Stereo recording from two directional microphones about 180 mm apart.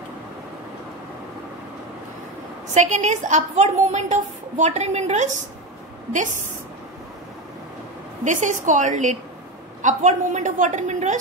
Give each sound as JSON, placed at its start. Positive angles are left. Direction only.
{"t": 2.7, "sound": "a woman's voice", "side_deg": -40}
{"t": 8.2, "sound": "a woman's voice", "side_deg": -45}